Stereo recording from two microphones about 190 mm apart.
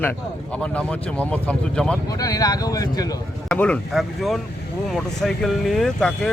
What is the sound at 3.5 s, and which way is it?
Speech, 5° left (ahead or behind).